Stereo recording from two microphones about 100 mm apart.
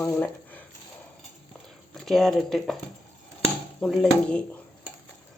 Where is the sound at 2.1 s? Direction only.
Centre (ahead or behind).